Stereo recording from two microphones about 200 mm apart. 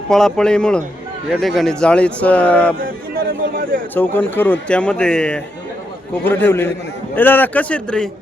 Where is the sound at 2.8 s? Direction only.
45° right (ahead or behind).